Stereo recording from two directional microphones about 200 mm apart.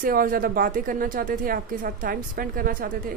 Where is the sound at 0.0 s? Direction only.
45° right (ahead or behind).